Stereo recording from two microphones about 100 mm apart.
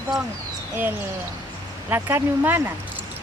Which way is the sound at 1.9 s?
20° right (ahead or behind).